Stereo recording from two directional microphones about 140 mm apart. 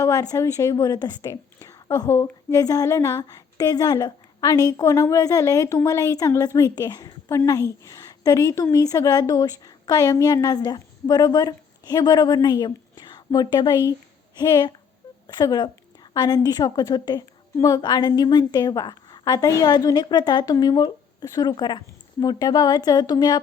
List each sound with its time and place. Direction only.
0.0 s a woman's voice: 25° left (ahead or behind)